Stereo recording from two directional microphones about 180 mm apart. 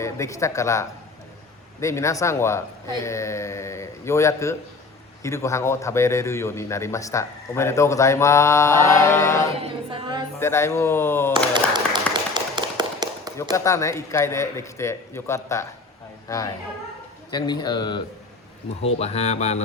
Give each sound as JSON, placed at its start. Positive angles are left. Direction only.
{"t": 0.0, "sound": "a man's voice", "side_deg": 15}
{"t": 9.6, "sound": "a capella", "side_deg": -30}
{"t": 10.4, "sound": "a man's voice", "side_deg": 15}
{"t": 11.5, "sound": "tap", "side_deg": -25}
{"t": 13.3, "sound": "a man's voice", "side_deg": 15}
{"t": 18.8, "sound": "speech", "side_deg": 35}